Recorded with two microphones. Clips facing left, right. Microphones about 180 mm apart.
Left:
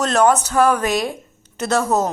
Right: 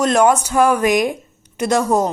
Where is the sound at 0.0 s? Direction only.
10° right (ahead or behind).